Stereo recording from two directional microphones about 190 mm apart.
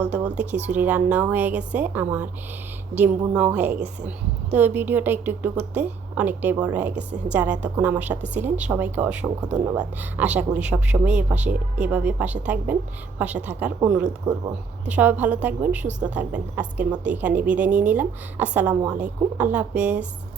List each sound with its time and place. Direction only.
0.1 s a woman's voice: 5° right (ahead or behind)
0.5 s speech: 40° right (ahead or behind)
0.8 s a woman's voice: 5° right (ahead or behind)